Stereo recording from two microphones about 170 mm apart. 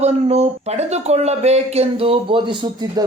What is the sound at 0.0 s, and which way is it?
Speech, 40° right (ahead or behind).